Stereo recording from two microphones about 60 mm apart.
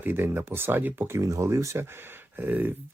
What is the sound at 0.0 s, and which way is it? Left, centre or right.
Speech, right.